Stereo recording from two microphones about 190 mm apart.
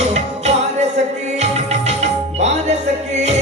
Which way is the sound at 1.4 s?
35° right (ahead or behind).